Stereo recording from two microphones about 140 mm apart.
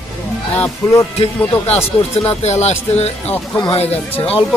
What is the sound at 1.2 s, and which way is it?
Speech, 50° left (ahead or behind).